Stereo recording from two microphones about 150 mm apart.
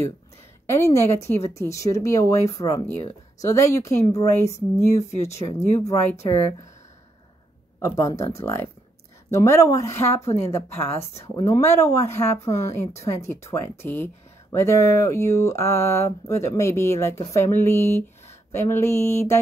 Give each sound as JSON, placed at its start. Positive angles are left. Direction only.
{"t": 0.7, "sound": "speech", "side_deg": 20}
{"t": 4.9, "sound": "speech", "side_deg": 45}
{"t": 5.6, "sound": "speech", "side_deg": 15}
{"t": 7.8, "sound": "speech", "side_deg": 20}
{"t": 10.3, "sound": "speech", "side_deg": 45}
{"t": 11.0, "sound": "speech", "side_deg": 20}
{"t": 12.4, "sound": "speech", "side_deg": 50}
{"t": 13.2, "sound": "speech", "side_deg": 15}